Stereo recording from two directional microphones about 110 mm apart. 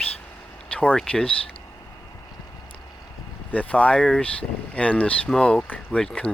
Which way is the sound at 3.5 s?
10° left (ahead or behind).